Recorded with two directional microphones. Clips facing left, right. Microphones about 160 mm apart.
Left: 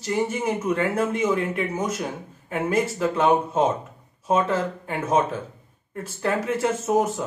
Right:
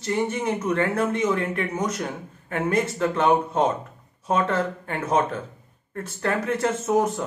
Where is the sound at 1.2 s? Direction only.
25° left (ahead or behind).